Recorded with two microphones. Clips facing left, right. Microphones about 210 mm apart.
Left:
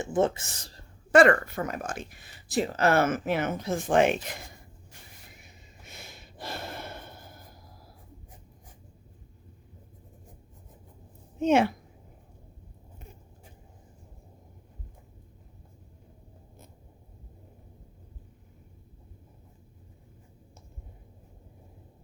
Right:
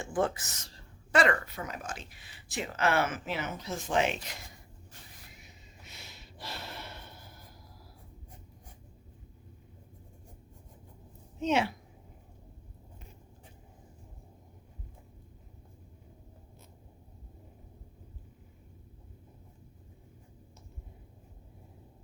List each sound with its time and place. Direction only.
0.0 s speech: 25° left (ahead or behind)
1.1 s speech: 50° left (ahead or behind)
5.4 s a sound: 50° left (ahead or behind)
11.3 s speech: 50° left (ahead or behind)